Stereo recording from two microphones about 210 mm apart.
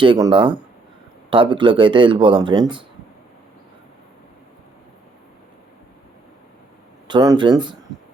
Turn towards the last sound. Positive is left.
turn(degrees=-20)  # may be behind; listen again after turning